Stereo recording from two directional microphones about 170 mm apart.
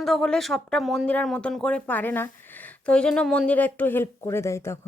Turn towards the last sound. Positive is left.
turn(degrees=15)  # may be behind; listen again after turning